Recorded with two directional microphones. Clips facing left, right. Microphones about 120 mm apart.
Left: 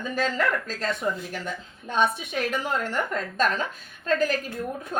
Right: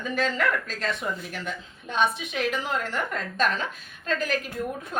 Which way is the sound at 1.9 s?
45° left (ahead or behind).